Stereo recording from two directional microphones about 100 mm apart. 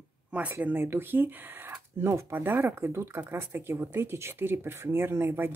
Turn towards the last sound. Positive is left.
turn(degrees=-20)  # may be behind; listen again after turning